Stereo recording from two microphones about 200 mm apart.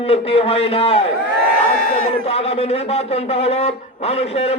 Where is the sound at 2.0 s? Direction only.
30° left (ahead or behind).